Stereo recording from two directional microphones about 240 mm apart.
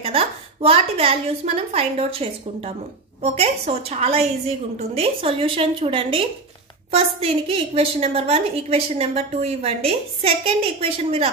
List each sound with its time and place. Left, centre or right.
0.0 s a woman's voice: right